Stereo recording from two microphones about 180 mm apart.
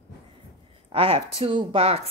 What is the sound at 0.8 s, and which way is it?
A woman's voice, 30° right (ahead or behind).